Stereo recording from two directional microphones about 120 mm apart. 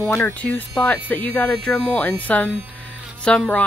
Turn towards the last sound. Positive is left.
turn(degrees=10)  # may be behind; listen again after turning